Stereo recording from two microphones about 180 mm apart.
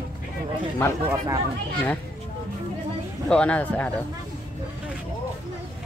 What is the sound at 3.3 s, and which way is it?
Speech, 5° left (ahead or behind).